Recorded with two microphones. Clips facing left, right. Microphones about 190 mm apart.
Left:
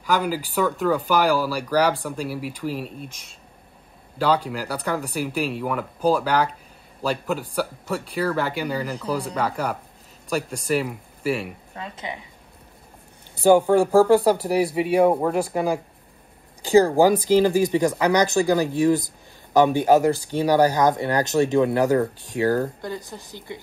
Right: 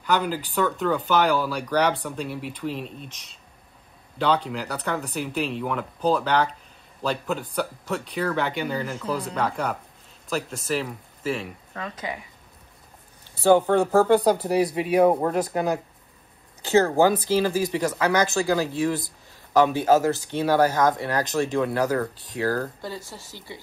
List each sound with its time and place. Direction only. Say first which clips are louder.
0.0 s speech: left 1 dB; 5° left (ahead or behind)
4.2 s speech: left 2 dB; 5° left (ahead or behind)
11.8 s speech: right 1 dB; 25° left (ahead or behind)
13.4 s speech: left 2 dB; 10° left (ahead or behind)